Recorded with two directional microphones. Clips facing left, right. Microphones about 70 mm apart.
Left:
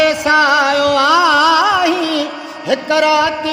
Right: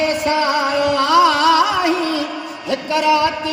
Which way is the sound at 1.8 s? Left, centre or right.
Left.